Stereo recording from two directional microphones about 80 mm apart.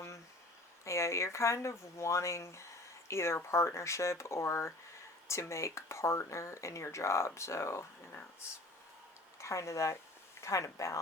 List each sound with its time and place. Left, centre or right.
0.9 s speech: left
9.4 s speech: left